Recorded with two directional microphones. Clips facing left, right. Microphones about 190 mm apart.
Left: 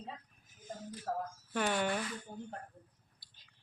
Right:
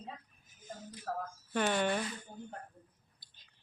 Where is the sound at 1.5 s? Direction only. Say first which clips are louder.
Right 2 dB; 5° left (ahead or behind).